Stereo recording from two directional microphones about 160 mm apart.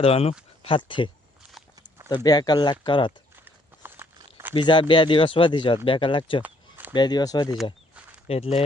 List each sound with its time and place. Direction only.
0.0 s speech: 35° left (ahead or behind)
3.4 s clip-clop: 15° right (ahead or behind)
4.2 s a sound: 15° right (ahead or behind)
4.5 s speech: 30° left (ahead or behind)
6.4 s a sound: 10° right (ahead or behind)
6.9 s speech: 25° left (ahead or behind)
8.3 s speech: 40° left (ahead or behind)